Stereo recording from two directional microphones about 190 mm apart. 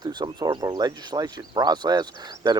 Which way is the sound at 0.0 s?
20° right (ahead or behind).